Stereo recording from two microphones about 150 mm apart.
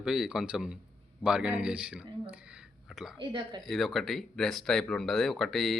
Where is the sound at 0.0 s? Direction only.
5° right (ahead or behind).